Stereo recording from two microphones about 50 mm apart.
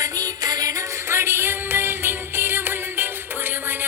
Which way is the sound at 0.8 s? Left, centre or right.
Right.